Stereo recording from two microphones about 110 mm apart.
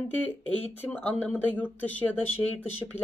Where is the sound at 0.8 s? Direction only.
15° left (ahead or behind).